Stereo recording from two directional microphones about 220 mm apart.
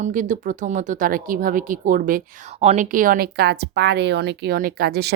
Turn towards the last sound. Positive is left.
turn(degrees=-45)  # may be behind; listen again after turning